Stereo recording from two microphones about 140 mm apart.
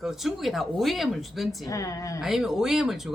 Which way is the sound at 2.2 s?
Centre (ahead or behind).